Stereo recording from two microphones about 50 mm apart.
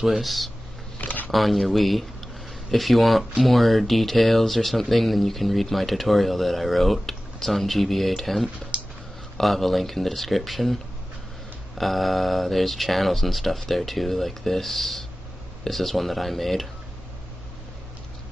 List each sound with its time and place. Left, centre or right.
0.0 s speech: centre
1.0 s a sound: left
1.3 s speech: centre
8.7 s a sound: right
9.4 s speech: centre
11.8 s speech: centre